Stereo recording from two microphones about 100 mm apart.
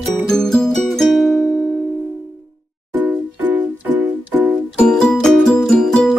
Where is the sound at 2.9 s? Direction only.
20° right (ahead or behind).